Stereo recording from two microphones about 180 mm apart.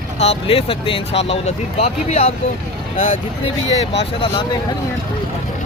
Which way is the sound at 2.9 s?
45° left (ahead or behind).